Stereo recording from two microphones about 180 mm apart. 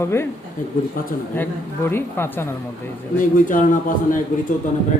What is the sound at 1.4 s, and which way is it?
Speech, 10° left (ahead or behind).